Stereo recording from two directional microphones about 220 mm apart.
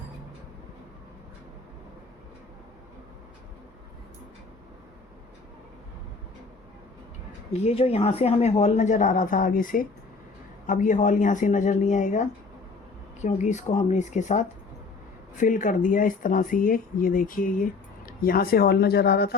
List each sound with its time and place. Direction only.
7.5 s speech: 30° left (ahead or behind); by 19.4 s 45° left (ahead or behind)